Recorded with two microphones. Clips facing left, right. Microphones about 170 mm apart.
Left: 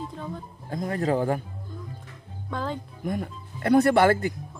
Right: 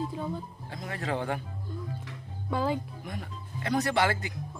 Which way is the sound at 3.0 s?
50° left (ahead or behind).